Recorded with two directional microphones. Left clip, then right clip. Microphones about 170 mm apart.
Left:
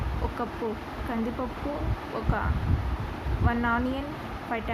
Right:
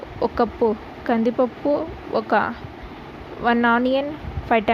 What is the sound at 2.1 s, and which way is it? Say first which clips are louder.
Speech: right 12 dB; 45° right (ahead or behind).